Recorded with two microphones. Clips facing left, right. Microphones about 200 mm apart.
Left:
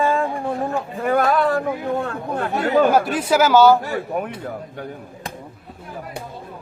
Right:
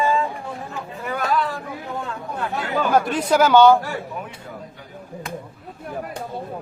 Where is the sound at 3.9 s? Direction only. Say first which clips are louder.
Left 6 dB; 60° left (ahead or behind).